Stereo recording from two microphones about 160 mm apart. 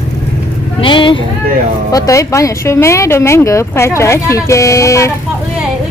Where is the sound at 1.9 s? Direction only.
20° left (ahead or behind).